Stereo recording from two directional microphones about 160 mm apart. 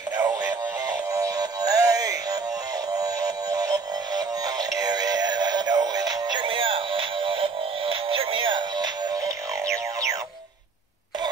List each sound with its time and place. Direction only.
0.2 s synthetic singing: 20° right (ahead or behind)
3.0 s music: 25° right (ahead or behind)